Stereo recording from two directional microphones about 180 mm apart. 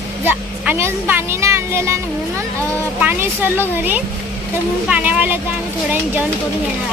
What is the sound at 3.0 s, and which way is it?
A woman's voice, 10° right (ahead or behind).